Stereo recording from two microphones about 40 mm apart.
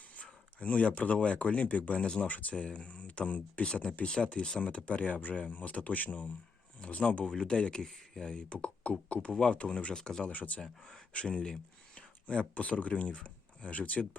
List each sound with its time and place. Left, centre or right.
0.2 s speech: left
4.0 s speech: left
7.3 s speech: left
10.3 s speech: left
10.6 s speech: centre
11.1 s speech: left